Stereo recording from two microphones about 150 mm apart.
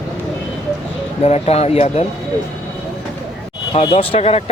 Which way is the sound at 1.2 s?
45° left (ahead or behind).